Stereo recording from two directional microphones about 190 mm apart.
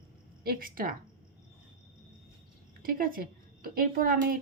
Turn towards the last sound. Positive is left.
turn(degrees=-50)  # may be behind; listen again after turning